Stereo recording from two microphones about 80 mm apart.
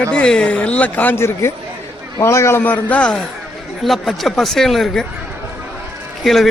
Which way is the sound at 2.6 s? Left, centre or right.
Centre.